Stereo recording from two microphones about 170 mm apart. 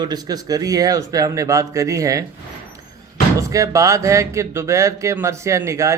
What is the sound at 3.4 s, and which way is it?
Speech, 20° right (ahead or behind).